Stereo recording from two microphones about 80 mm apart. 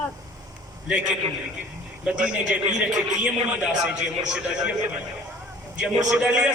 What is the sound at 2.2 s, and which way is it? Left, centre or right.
A man's voice, centre.